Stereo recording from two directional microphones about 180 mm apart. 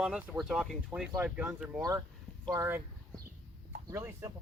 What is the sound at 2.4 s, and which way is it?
Speech, 20° right (ahead or behind).